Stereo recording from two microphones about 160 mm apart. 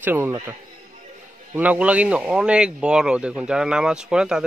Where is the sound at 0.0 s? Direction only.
15° right (ahead or behind).